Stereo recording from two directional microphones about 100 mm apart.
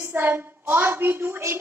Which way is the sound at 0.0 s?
20° right (ahead or behind).